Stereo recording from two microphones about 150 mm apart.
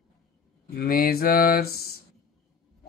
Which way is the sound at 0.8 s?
85° left.